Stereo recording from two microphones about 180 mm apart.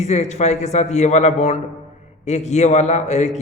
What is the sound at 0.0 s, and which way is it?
A man's voice, 40° left (ahead or behind).